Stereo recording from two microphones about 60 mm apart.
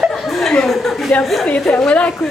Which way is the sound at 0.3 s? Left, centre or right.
Centre.